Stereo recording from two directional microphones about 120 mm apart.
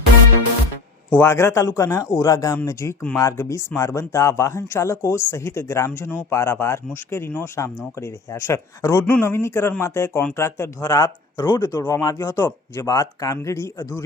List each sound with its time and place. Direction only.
1.1 s speech: 20° left (ahead or behind)